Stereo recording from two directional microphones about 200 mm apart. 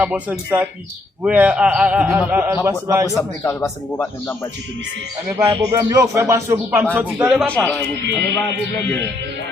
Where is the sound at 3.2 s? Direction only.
15° left (ahead or behind).